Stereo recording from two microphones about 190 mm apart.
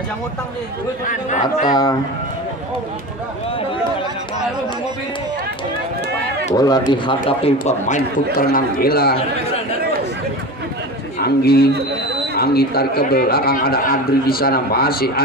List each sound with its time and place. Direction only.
1.7 s speech: 20° left (ahead or behind)
6.5 s speech: 20° left (ahead or behind)
7.6 s a man's voice: 40° left (ahead or behind)
11.1 s a man's voice: 55° left (ahead or behind)